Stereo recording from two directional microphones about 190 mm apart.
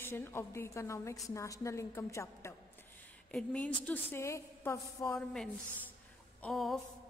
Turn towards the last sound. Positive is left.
turn(degrees=0)  # may be behind; listen again after turning